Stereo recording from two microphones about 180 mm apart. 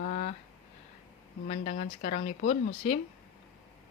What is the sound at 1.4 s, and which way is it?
Speech, 40° left (ahead or behind).